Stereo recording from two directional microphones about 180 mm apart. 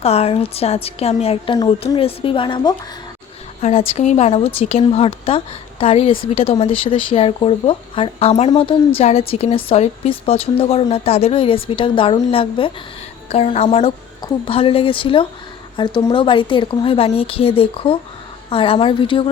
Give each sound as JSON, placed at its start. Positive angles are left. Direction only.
{"t": 0.0, "sound": "speech", "side_deg": 35}